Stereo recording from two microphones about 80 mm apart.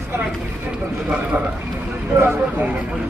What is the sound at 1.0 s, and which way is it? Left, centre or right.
Speech, centre.